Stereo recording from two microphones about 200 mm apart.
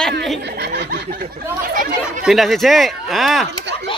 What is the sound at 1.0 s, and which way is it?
Speech, 45° right (ahead or behind).